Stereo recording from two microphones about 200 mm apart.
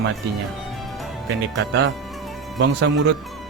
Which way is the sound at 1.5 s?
60° right (ahead or behind).